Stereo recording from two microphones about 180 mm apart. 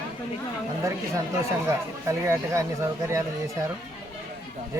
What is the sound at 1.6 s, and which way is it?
Speech, 15° right (ahead or behind).